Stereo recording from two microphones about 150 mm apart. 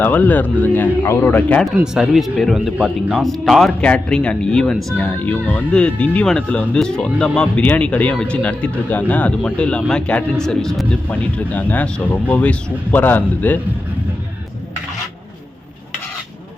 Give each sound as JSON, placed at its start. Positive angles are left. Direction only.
{"t": 0.0, "sound": "speech", "side_deg": 10}
{"t": 1.6, "sound": "speech", "side_deg": 0}